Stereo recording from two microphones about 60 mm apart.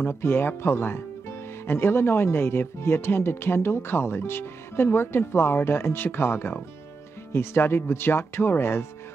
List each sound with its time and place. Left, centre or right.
0.0 s speech: left